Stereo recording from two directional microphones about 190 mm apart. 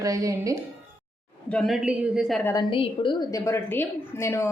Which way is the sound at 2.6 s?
30° left (ahead or behind).